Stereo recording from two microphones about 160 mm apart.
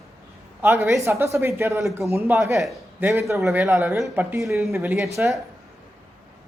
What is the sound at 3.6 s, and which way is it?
A man's voice, 5° right (ahead or behind).